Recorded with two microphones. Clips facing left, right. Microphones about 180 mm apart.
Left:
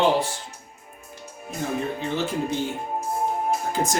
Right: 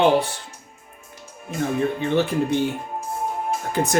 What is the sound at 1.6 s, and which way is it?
Speech, 60° right (ahead or behind).